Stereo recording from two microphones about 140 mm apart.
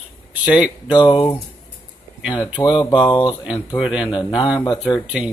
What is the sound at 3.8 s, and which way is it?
Speech, 5° right (ahead or behind).